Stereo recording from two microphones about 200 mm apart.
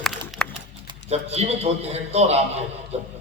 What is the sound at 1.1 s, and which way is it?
A man's voice, 30° right (ahead or behind).